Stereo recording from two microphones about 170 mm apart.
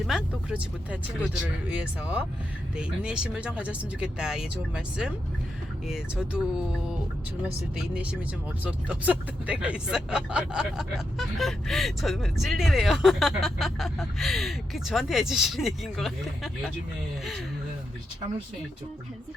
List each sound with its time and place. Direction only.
0.0 s speech: 5° right (ahead or behind)
7.8 s speech: 5° right (ahead or behind)